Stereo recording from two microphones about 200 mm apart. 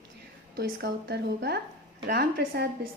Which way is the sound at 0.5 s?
55° right (ahead or behind).